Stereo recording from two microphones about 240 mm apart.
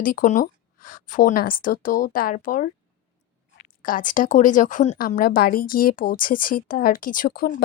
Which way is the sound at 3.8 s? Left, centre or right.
Left.